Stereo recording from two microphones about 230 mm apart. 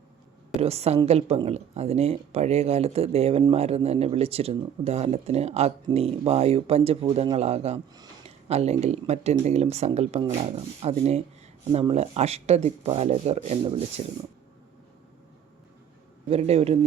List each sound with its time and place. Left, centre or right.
0.6 s speech: right
16.3 s speech: right